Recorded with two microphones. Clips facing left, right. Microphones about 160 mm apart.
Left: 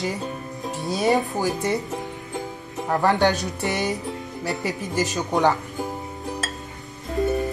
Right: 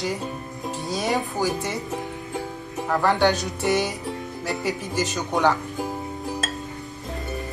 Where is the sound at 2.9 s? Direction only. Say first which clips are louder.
Left 1 dB; 20° left (ahead or behind).